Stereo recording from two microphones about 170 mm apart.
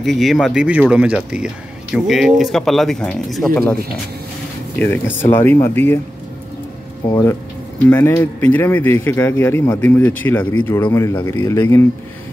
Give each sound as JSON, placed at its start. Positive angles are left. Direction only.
{"t": 0.0, "sound": "speech", "side_deg": 0}
{"t": 4.7, "sound": "speech", "side_deg": 10}
{"t": 7.1, "sound": "speech", "side_deg": 20}